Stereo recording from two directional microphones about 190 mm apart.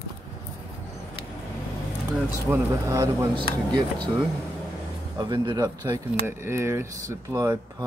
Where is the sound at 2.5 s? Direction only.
15° right (ahead or behind).